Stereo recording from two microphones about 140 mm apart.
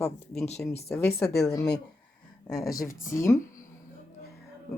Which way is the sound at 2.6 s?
25° left (ahead or behind).